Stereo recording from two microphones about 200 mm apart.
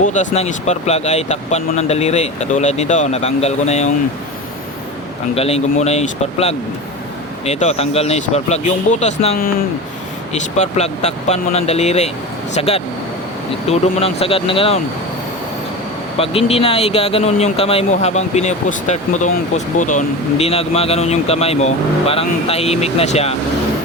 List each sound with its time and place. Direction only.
0.0 s speech: 35° left (ahead or behind)
5.3 s speech: 30° left (ahead or behind)
10.6 s speech: 35° left (ahead or behind)
16.1 s speech: 30° left (ahead or behind)